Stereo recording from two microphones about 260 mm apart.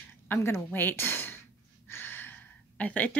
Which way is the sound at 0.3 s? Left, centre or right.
Centre.